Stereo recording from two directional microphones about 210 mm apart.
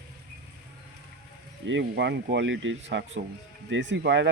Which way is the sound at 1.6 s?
60° right (ahead or behind).